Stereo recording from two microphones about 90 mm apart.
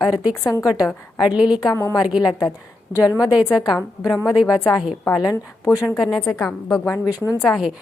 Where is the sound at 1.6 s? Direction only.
35° left (ahead or behind).